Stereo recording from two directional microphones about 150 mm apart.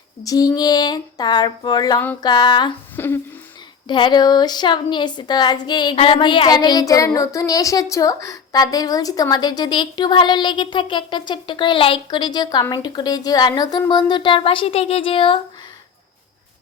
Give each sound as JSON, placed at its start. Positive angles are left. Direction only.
{"t": 0.2, "sound": "a woman's voice", "side_deg": 25}
{"t": 2.9, "sound": "speech", "side_deg": 15}
{"t": 3.8, "sound": "a woman's voice", "side_deg": 30}